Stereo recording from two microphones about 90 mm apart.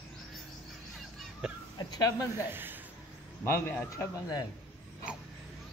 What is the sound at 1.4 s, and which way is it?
Speech, 5° right (ahead or behind).